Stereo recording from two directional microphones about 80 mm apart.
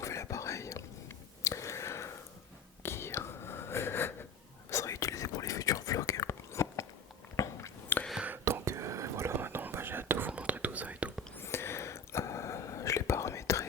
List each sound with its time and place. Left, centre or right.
0.0 s whispering: left
7.9 s whispering: left
8.4 s whispering: right; by 11.1 s centre
11.3 s whispering: left